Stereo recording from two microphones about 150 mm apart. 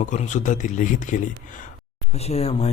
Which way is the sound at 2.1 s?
45° left (ahead or behind).